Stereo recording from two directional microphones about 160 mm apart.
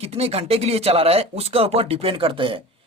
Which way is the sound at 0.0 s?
40° right (ahead or behind).